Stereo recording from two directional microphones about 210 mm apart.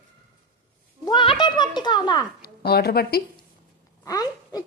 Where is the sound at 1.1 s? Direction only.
20° left (ahead or behind).